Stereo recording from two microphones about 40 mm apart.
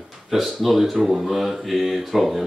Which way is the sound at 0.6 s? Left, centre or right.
Centre.